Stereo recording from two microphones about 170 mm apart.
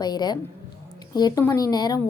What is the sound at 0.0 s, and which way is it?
A woman's voice, 25° left (ahead or behind).